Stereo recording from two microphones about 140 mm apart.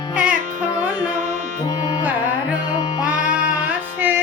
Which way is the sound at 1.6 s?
30° left (ahead or behind).